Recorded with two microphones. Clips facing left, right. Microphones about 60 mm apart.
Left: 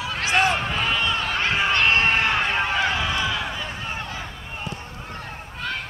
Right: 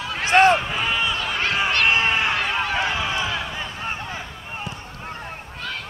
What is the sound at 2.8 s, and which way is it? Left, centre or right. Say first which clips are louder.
Run: left 1 dB; right.